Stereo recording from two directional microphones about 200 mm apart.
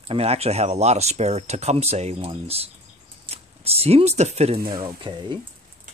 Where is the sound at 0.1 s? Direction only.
30° right (ahead or behind).